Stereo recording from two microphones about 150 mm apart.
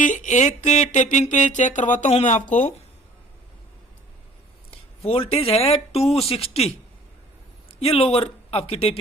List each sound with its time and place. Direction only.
0.0 s mantra: 55° left (ahead or behind)
5.0 s speech: 40° left (ahead or behind)
7.8 s speech: 45° left (ahead or behind)